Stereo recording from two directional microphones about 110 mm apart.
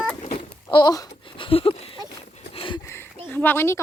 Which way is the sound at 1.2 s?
50° left (ahead or behind).